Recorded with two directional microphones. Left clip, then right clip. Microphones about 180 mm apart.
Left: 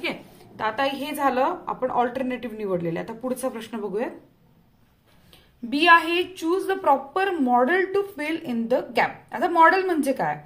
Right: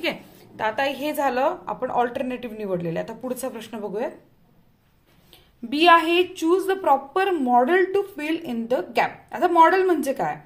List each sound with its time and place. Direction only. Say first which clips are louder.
0.0 s a sound: right 3 dB; 45° right (ahead or behind)
0.7 s a woman's voice: right 1 dB; 30° right (ahead or behind)
5.3 s a woman's voice: even; 25° right (ahead or behind)